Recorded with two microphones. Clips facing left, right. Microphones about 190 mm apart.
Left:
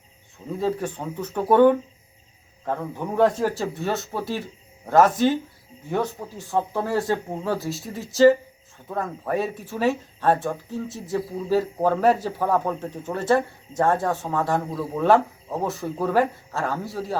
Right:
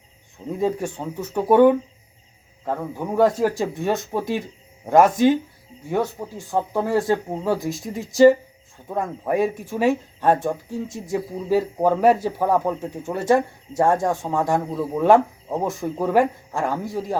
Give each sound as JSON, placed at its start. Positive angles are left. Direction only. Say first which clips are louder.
{"t": 0.6, "sound": "speech", "louder": "right 2 dB", "side_deg": -10}